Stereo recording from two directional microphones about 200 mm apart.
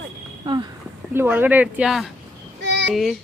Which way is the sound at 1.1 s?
10° right (ahead or behind).